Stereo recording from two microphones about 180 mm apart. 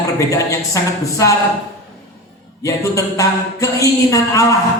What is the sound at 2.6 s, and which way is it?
Speech, 20° left (ahead or behind).